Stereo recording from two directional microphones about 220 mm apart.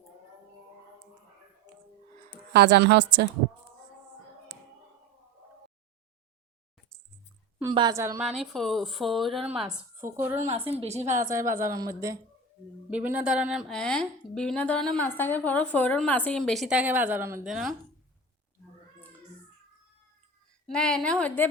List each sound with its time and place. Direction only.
2.5 s a woman's voice: 50° right (ahead or behind)
7.6 s a woman's voice: 20° right (ahead or behind)
8.2 s a woman's voice: centre (ahead or behind)
10.7 s a woman's voice: 30° right (ahead or behind)
11.3 s a woman's voice: 15° right (ahead or behind)
20.7 s a woman's voice: 5° left (ahead or behind)